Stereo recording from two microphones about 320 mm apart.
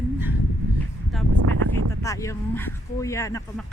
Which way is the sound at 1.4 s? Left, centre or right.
Right.